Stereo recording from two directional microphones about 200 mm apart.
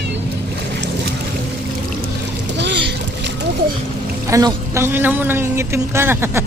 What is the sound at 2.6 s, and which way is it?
Boat, 60° right (ahead or behind).